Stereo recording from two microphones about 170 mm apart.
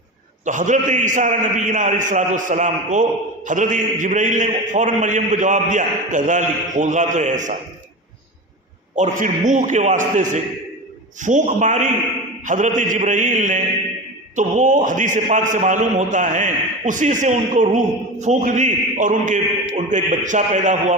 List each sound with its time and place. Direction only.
0.4 s a man's voice: 50° right (ahead or behind)
9.0 s a man's voice: 50° right (ahead or behind)